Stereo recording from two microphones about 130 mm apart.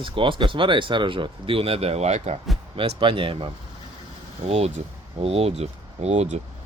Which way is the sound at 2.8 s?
45° right (ahead or behind).